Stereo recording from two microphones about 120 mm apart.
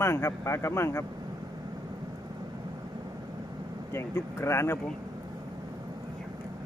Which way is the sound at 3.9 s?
20° left (ahead or behind).